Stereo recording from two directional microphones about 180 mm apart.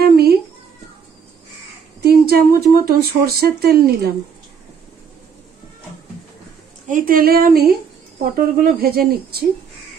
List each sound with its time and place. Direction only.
0.0 s a sound: 60° right (ahead or behind)
2.0 s speech: 60° right (ahead or behind)
6.9 s speech: 50° right (ahead or behind)